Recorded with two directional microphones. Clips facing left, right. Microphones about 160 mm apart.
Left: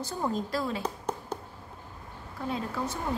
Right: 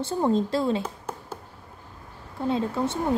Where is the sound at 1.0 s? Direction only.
5° right (ahead or behind).